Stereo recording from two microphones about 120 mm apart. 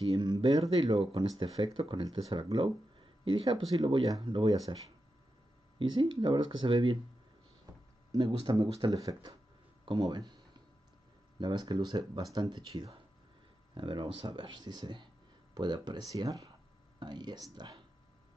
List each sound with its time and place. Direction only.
0.2 s speech: 40° right (ahead or behind)
2.5 s speech: 50° right (ahead or behind)
3.7 s speech: 35° right (ahead or behind)
5.8 s speech: 45° right (ahead or behind)
8.1 s speech: 35° right (ahead or behind)
9.8 s a sound: 35° right (ahead or behind)
11.3 s speech: 40° right (ahead or behind)